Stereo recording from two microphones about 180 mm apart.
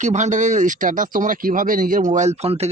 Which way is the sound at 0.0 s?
40° right (ahead or behind).